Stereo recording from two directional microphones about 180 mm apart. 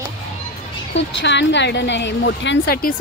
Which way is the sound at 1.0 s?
80° left.